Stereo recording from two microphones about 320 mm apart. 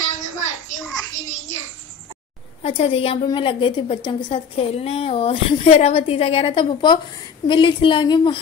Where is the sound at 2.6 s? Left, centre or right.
Centre.